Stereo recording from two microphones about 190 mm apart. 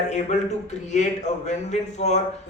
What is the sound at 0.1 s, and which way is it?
A man's voice, 35° left (ahead or behind).